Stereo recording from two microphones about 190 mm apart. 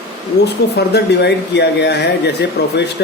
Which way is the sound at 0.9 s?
60° left (ahead or behind).